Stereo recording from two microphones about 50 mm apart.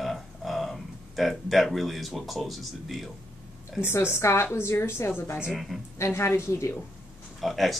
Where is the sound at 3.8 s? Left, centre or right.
Left.